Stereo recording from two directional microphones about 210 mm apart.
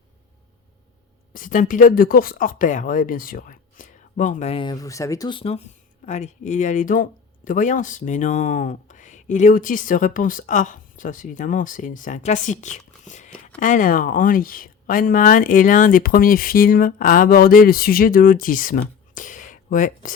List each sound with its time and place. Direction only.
1.3 s speech: 40° left (ahead or behind)